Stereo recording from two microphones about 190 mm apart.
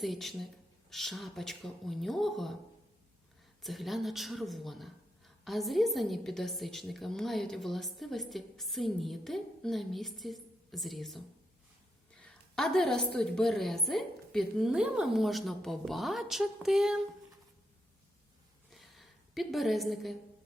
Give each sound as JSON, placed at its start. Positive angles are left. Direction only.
{"t": 0.0, "sound": "speech", "side_deg": 0}
{"t": 3.6, "sound": "speech", "side_deg": 0}
{"t": 18.7, "sound": "a sound", "side_deg": 0}